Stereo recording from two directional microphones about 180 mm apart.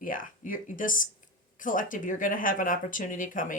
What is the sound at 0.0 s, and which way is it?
Speech, 50° left (ahead or behind).